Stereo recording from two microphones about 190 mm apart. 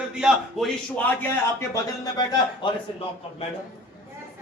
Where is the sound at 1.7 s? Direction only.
20° left (ahead or behind).